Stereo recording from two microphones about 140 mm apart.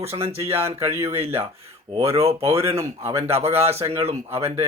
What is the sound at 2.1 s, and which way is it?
Speech, 45° right (ahead or behind).